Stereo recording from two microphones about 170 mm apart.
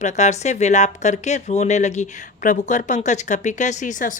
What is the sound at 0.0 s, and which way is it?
Speech, 45° left (ahead or behind).